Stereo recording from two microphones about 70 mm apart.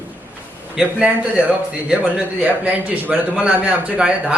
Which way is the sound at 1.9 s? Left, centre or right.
Right.